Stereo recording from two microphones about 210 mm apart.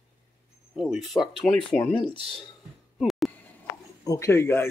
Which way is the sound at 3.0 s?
Centre (ahead or behind).